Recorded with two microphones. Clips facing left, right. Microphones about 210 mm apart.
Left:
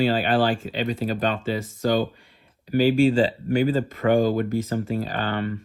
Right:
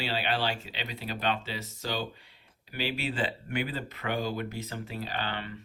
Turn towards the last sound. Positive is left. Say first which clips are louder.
# left 9 dB
turn(degrees=50)  # may be behind; listen again after turning